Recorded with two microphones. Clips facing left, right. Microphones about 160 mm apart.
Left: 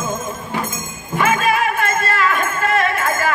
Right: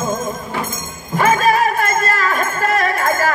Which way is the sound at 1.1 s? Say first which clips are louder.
Right 3 dB; 40° right (ahead or behind).